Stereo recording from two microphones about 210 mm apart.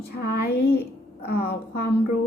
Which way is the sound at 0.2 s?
45° left (ahead or behind).